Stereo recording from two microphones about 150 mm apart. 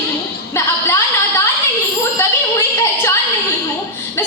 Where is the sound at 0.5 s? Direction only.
20° left (ahead or behind).